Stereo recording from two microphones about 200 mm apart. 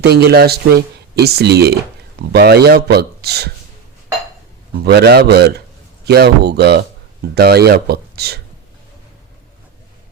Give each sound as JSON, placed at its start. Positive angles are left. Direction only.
{"t": 0.0, "sound": "speech", "side_deg": -55}
{"t": 4.8, "sound": "speech", "side_deg": -55}